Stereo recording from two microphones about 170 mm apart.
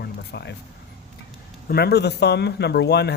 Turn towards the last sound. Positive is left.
turn(degrees=80)